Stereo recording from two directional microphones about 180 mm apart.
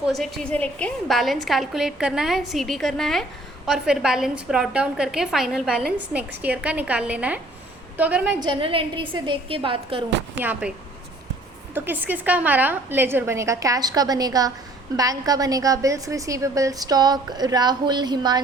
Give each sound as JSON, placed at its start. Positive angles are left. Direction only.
{"t": 0.0, "sound": "a woman's voice", "side_deg": 0}
{"t": 8.4, "sound": "a woman's voice", "side_deg": -30}
{"t": 10.4, "sound": "a woman's voice", "side_deg": -10}
{"t": 11.7, "sound": "a woman's voice", "side_deg": -10}